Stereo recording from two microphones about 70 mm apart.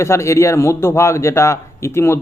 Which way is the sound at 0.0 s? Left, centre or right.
Left.